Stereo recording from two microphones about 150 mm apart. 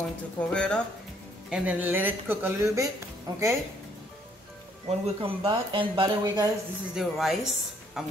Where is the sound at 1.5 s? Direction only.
10° right (ahead or behind); by 3.4 s 25° right (ahead or behind).